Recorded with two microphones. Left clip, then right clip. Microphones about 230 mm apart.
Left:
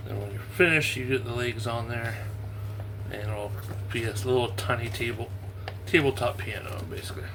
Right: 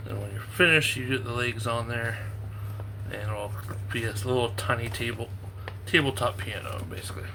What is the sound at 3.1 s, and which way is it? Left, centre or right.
A man's voice, centre.